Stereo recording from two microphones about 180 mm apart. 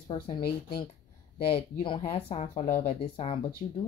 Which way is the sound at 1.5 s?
30° left (ahead or behind).